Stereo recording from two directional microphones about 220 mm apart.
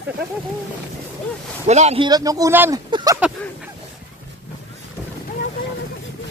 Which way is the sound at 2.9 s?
15° right (ahead or behind).